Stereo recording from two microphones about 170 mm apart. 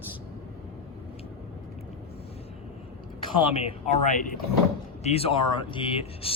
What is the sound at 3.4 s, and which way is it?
Speech, 35° left (ahead or behind).